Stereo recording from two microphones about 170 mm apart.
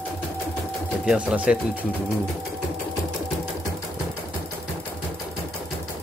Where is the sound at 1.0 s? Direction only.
5° right (ahead or behind).